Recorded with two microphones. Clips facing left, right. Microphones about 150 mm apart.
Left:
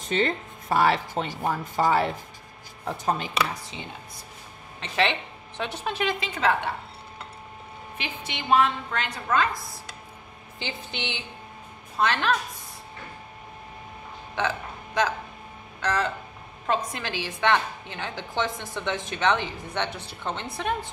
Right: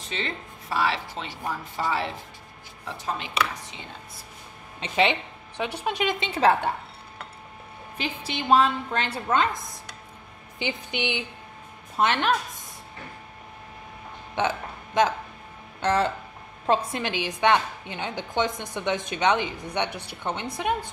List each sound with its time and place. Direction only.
0.1 s speech: 50° left (ahead or behind)
4.7 s a woman's voice: 20° right (ahead or behind)
8.3 s a woman's voice: 35° right (ahead or behind)
14.4 s a woman's voice: 20° right (ahead or behind)